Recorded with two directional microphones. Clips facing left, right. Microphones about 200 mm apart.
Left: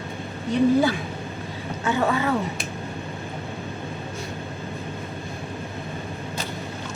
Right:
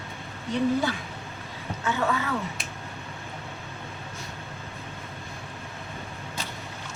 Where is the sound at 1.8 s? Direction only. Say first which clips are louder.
Left 5 dB; 35° left (ahead or behind).